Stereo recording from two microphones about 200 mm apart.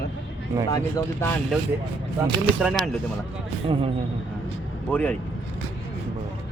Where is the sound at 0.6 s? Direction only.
15° left (ahead or behind).